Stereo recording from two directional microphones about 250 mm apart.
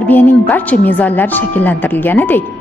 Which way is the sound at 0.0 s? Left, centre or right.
Centre.